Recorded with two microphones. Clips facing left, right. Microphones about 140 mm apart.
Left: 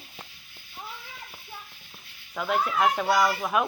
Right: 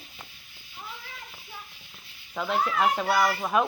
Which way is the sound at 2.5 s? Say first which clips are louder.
Left 1 dB; 10° left (ahead or behind).